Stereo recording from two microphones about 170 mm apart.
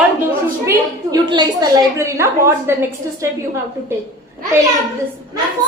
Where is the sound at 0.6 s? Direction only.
20° right (ahead or behind).